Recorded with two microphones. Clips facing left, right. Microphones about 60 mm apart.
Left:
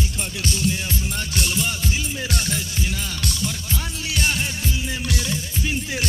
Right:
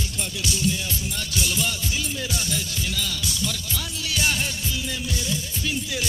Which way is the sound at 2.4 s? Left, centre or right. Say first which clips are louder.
Left 2 dB; left.